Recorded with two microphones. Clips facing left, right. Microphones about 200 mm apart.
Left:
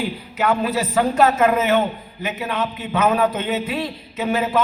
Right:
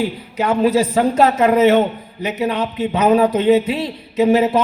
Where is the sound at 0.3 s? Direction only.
35° right (ahead or behind).